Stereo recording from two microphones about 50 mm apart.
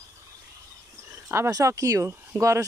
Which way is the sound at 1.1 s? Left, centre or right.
Right.